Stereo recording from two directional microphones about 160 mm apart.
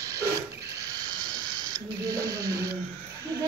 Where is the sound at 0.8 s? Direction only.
25° right (ahead or behind).